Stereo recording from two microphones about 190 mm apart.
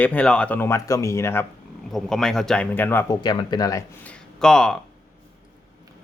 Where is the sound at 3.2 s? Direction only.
25° left (ahead or behind).